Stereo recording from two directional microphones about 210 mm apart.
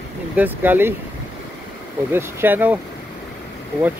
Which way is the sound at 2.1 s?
10° right (ahead or behind).